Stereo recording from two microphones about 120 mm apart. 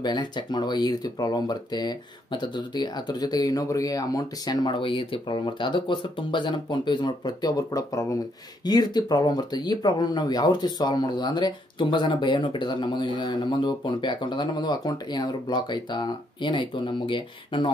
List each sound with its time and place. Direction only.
0.0 s speech: 40° left (ahead or behind)